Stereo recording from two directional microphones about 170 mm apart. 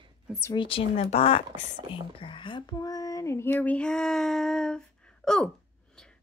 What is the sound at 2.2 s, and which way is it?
Child singing, 30° left (ahead or behind).